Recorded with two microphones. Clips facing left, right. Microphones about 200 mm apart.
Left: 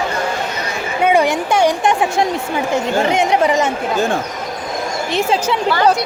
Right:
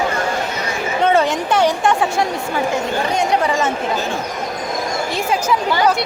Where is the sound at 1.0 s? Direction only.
10° left (ahead or behind).